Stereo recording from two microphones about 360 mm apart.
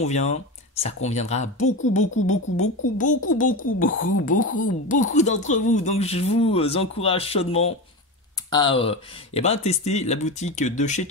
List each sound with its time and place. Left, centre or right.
0.0 s speech: centre
3.8 s speech: left
4.3 s speech: left